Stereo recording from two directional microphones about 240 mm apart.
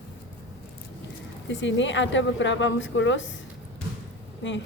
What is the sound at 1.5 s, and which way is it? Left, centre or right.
A woman's voice, left.